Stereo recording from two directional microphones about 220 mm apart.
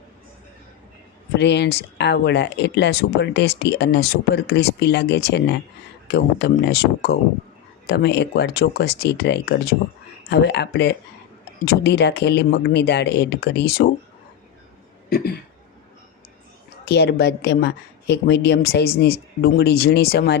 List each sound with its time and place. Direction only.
1.4 s speech: 50° left (ahead or behind)
15.1 s speech: 45° left (ahead or behind)
16.8 s speech: 50° left (ahead or behind)